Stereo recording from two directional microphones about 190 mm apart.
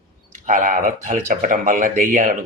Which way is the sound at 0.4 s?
45° right (ahead or behind).